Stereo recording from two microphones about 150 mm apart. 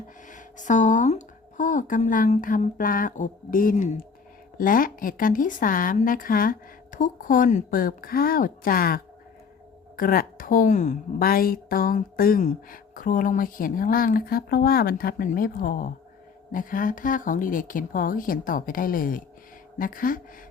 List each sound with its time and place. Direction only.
0.3 s a woman's voice: 60° left (ahead or behind); by 9.0 s 80° left
10.0 s a woman's voice: 70° left (ahead or behind); by 10.9 s 55° left (ahead or behind)
11.2 s a woman's voice: 80° left